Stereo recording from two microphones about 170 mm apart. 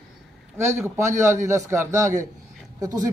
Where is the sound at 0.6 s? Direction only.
15° right (ahead or behind).